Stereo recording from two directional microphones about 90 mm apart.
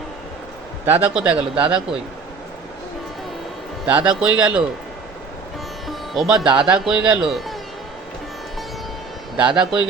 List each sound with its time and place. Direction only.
0.9 s a man's voice: 20° right (ahead or behind)
3.8 s speech: 15° right (ahead or behind)
5.9 s speech: 5° right (ahead or behind)
9.4 s speech: 10° right (ahead or behind)